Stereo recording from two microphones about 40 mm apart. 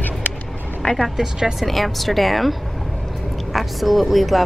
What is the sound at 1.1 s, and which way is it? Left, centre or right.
Speech, centre.